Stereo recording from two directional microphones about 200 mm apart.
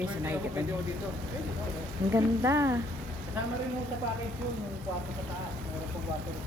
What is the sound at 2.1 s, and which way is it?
Speech, 15° right (ahead or behind).